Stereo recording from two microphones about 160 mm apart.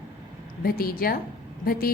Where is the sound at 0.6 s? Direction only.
65° left (ahead or behind).